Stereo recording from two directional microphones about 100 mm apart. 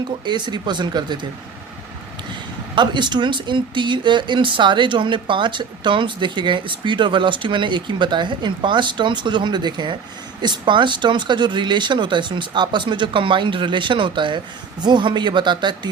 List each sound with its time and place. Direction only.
0.3 s speech: 50° right (ahead or behind)
2.7 s speech: 50° right (ahead or behind)